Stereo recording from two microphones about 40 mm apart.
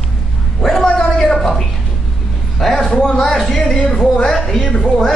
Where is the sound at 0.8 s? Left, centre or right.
Centre.